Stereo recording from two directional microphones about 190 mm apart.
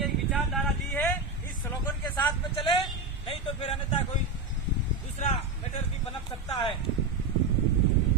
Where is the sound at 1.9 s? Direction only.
10° left (ahead or behind).